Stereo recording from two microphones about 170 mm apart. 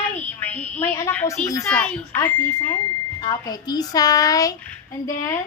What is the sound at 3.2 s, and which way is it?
Speech, 25° left (ahead or behind).